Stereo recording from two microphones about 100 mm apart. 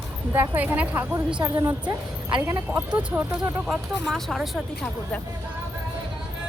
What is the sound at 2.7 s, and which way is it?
Speech, 25° right (ahead or behind).